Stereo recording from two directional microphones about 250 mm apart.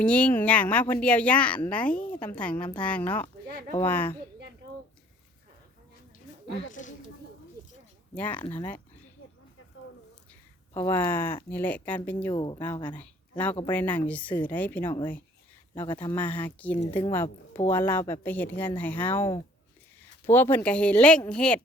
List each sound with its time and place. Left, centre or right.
0.0 s speech: centre
6.6 s speech: left
8.1 s speech: centre
10.8 s speech: centre
12.4 s speech: centre
12.6 s speech: centre
13.0 s a sound: centre
13.7 s speech: centre